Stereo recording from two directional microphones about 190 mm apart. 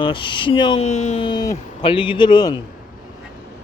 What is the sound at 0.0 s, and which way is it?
Speech, 25° left (ahead or behind).